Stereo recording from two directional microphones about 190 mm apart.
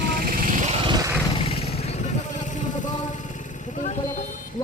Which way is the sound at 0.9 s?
20° right (ahead or behind).